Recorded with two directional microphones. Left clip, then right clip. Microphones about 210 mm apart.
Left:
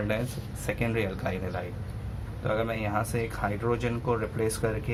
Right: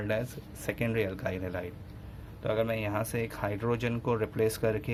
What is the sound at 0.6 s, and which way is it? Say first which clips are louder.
Speech: left 1 dB; 35° right (ahead or behind).